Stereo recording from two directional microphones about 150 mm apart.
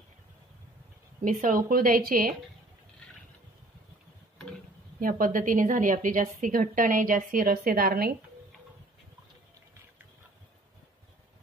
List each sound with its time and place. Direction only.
1.2 s a woman's voice: 65° right (ahead or behind)
5.0 s a woman's voice: 65° right (ahead or behind)